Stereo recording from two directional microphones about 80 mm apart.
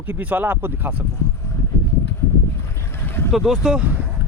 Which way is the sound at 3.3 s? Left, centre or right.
Centre.